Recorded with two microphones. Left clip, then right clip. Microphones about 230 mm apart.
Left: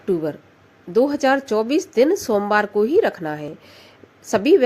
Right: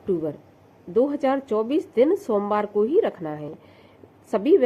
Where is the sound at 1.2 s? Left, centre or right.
Left.